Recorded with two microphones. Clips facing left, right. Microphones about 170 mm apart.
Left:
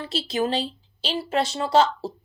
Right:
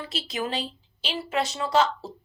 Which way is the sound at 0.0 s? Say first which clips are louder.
Left 6 dB; 30° left (ahead or behind).